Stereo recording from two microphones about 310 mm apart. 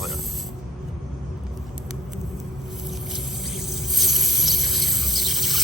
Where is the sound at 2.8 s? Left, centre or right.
Centre.